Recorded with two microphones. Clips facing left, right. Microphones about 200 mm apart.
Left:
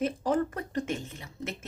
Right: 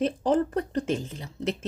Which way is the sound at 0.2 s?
30° right (ahead or behind).